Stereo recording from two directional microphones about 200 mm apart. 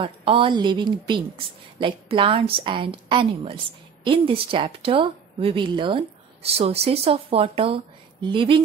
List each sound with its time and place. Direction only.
0.0 s speech: 25° right (ahead or behind)